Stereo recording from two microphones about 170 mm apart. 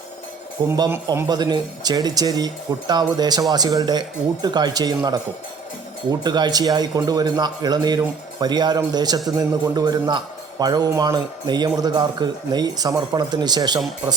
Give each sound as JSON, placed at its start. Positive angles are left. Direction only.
{"t": 0.7, "sound": "a man's voice", "side_deg": -20}